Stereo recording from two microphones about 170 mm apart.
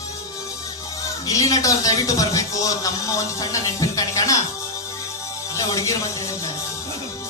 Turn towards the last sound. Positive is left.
turn(degrees=20)  # may be behind; listen again after turning